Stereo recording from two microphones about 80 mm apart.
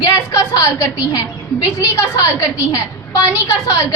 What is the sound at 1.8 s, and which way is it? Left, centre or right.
A woman's voice, left.